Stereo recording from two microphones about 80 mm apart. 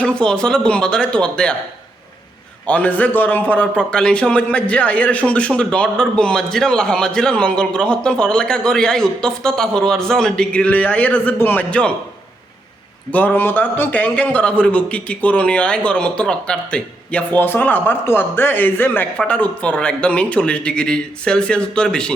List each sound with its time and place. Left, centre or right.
0.0 s a man's voice: centre
2.6 s a man's voice: centre
13.1 s a man's voice: centre